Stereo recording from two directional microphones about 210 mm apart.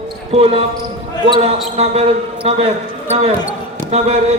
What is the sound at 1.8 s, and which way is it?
Speech, 30° right (ahead or behind).